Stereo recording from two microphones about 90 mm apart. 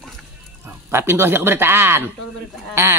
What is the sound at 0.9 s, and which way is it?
A man's voice, 25° right (ahead or behind).